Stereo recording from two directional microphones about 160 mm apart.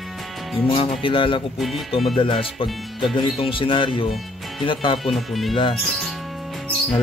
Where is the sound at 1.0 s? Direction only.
30° left (ahead or behind).